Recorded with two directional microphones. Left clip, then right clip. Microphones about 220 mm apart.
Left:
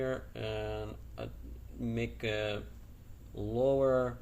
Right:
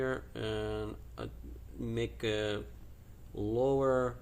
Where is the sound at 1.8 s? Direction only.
20° right (ahead or behind).